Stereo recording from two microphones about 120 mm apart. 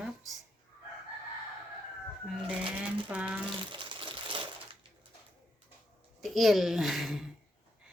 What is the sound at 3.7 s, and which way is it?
Crumpling, 45° right (ahead or behind).